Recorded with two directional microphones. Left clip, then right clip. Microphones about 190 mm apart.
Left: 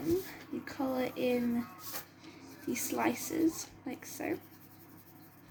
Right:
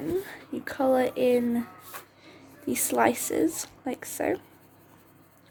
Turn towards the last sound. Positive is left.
turn(degrees=-65)  # may be behind; listen again after turning